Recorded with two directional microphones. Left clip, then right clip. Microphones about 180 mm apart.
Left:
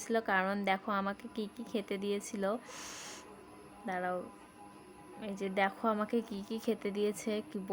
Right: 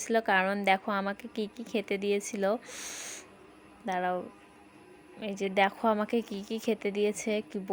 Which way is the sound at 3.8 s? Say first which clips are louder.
Right 6 dB; 25° right (ahead or behind).